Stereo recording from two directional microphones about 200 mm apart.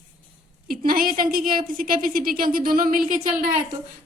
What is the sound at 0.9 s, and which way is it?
A woman's voice, 45° right (ahead or behind).